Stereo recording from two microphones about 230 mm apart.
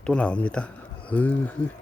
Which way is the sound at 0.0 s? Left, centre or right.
Centre.